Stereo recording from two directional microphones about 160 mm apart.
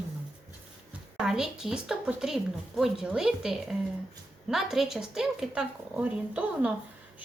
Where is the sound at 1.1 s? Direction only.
5° right (ahead or behind).